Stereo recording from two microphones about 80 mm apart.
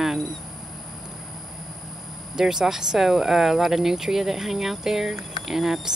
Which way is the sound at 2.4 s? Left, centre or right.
Centre.